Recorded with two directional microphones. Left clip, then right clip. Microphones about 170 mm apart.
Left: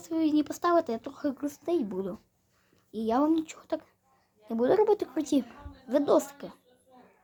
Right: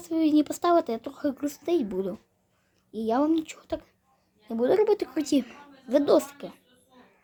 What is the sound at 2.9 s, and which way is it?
Speech, centre (ahead or behind).